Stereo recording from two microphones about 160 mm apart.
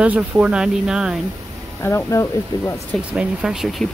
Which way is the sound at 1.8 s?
20° left (ahead or behind).